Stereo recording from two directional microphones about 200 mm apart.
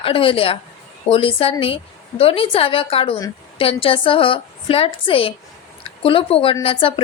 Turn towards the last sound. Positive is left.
turn(degrees=25)  # may be behind; listen again after turning